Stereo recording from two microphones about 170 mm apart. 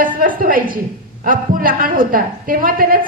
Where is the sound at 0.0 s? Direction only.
55° right (ahead or behind).